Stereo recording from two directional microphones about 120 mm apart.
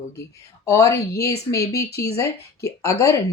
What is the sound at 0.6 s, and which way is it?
Speech, 25° left (ahead or behind).